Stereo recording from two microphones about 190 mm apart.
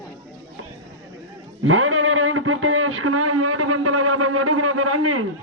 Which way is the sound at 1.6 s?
90° right.